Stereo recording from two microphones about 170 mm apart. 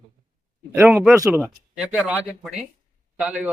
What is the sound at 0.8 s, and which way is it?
Speech, 5° right (ahead or behind).